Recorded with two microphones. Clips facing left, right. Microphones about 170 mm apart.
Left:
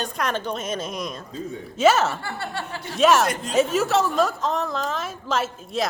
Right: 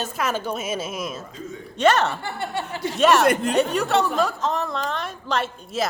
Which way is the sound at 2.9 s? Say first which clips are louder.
Right 1 dB; centre (ahead or behind).